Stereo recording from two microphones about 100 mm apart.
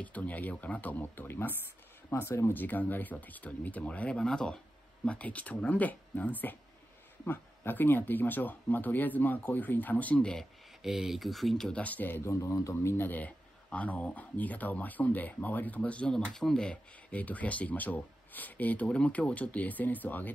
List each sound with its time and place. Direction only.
0.0 s speech: 15° left (ahead or behind)
10.8 s speech: 5° right (ahead or behind); by 12.2 s 15° left (ahead or behind)
12.3 s speech: 30° left (ahead or behind)